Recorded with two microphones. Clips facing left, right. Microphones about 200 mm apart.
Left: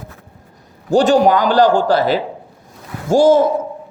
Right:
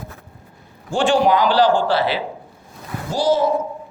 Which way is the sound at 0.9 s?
40° left (ahead or behind).